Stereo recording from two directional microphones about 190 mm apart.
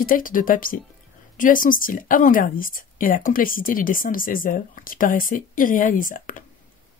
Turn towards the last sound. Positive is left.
turn(degrees=45)  # may be behind; listen again after turning